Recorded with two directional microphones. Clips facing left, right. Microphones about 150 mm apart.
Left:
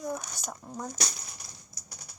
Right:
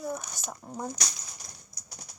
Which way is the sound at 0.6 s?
15° right (ahead or behind).